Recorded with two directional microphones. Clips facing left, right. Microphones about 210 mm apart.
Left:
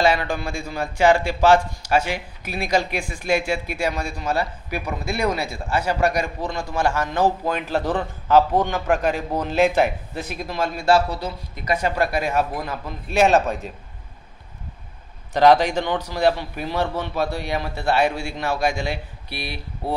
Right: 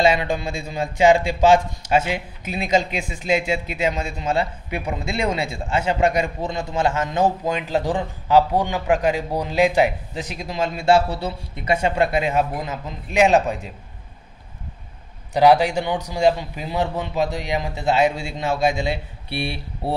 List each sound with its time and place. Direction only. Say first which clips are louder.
0.0 s a man's voice: right 1 dB; 20° right (ahead or behind)
15.3 s a man's voice: even; 10° right (ahead or behind); by 19.9 s 25° right (ahead or behind)